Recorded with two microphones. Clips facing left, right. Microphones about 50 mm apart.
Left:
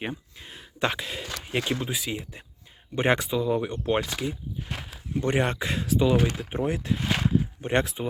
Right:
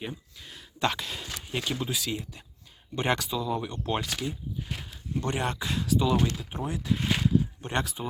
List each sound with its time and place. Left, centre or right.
0.0 s speech: left
4.7 s a sound: centre
5.2 s speech: left
6.9 s speech: centre
7.2 s speech: left